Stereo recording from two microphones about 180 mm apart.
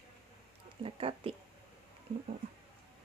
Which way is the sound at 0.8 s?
30° right (ahead or behind).